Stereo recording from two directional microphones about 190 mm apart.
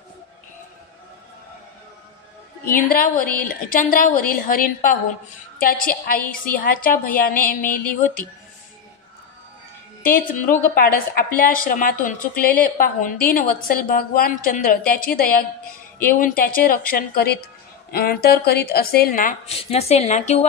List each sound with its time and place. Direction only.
2.6 s a woman's voice: 50° left (ahead or behind)
10.0 s a woman's voice: 50° left (ahead or behind)
19.5 s a woman's voice: 35° left (ahead or behind)